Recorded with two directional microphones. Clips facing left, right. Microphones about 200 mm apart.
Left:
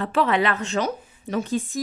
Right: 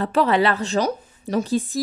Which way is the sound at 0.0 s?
40° right (ahead or behind).